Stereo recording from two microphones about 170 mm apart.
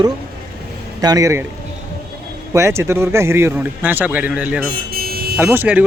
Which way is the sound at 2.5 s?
15° right (ahead or behind).